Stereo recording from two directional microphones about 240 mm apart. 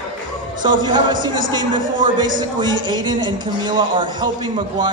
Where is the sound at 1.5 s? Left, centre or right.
Centre.